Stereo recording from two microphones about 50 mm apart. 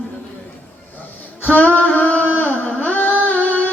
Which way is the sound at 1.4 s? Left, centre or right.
Left.